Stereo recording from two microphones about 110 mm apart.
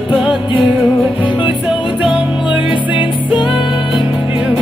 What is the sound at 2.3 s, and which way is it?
Music, 50° left (ahead or behind).